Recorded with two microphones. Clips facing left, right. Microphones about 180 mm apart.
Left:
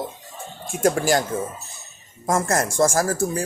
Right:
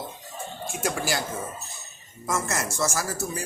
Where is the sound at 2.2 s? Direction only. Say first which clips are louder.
Left 7 dB; 50° left (ahead or behind).